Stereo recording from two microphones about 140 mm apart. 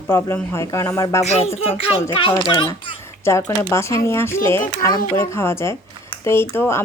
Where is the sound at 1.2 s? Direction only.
50° left (ahead or behind).